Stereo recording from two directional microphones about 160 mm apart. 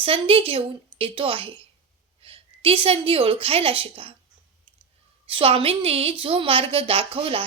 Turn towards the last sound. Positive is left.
turn(degrees=-35)  # may be behind; listen again after turning